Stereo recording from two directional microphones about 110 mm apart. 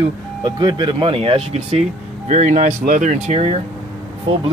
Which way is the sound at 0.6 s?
40° right (ahead or behind).